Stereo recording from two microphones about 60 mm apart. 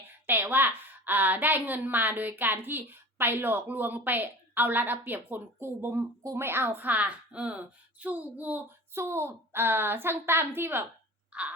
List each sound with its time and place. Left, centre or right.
0.3 s a woman's voice: right
8.9 s a woman's voice: right
11.3 s a sound: right